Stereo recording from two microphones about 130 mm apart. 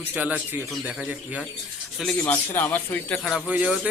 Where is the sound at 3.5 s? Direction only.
10° right (ahead or behind).